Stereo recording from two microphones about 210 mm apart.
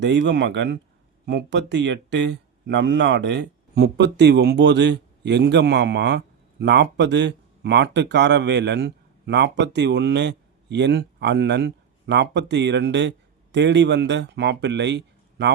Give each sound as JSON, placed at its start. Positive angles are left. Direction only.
{"t": 0.0, "sound": "speech", "side_deg": -55}